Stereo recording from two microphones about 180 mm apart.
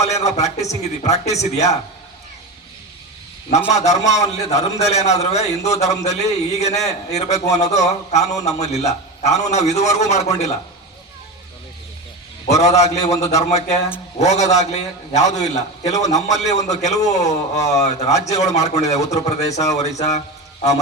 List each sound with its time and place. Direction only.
0.0 s a man's voice: 40° left (ahead or behind)
3.7 s a man's voice: 40° left (ahead or behind)
12.6 s a man's voice: 35° left (ahead or behind)